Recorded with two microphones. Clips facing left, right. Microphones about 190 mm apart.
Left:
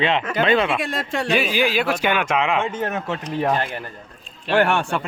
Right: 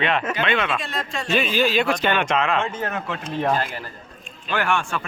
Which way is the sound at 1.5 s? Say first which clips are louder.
Even; 10° left (ahead or behind).